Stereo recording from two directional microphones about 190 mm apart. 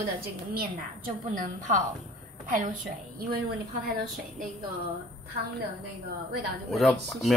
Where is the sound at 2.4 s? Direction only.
40° right (ahead or behind).